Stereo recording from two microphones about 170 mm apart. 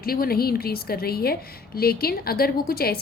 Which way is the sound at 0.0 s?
60° left (ahead or behind).